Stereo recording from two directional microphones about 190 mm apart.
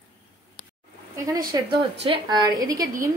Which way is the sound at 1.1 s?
15° right (ahead or behind).